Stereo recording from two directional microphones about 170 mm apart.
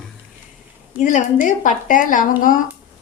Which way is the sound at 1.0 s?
45° left (ahead or behind).